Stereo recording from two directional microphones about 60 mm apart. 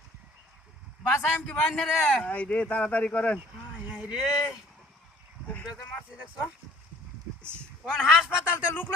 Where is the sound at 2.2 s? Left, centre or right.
Left.